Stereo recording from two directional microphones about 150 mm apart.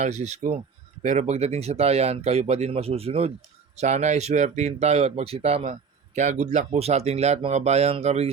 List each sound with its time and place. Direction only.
0.0 s speech: 50° right (ahead or behind)